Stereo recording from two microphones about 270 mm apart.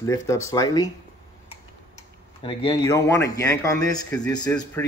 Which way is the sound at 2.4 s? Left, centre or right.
Centre.